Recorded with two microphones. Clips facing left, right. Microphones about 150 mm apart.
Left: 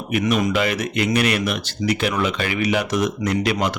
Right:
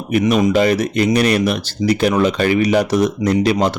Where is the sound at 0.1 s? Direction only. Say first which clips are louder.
Right 6 dB; 35° right (ahead or behind).